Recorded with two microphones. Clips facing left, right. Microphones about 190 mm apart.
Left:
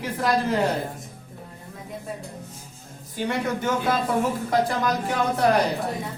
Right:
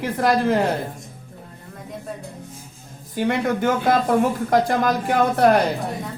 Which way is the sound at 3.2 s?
55° right (ahead or behind).